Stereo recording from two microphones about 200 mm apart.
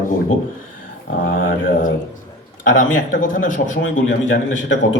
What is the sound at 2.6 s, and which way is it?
Speech, 70° left (ahead or behind).